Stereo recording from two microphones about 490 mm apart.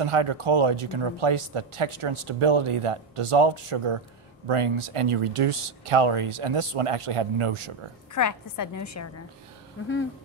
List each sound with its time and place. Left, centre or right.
0.0 s speech: right
8.1 s a woman's voice: left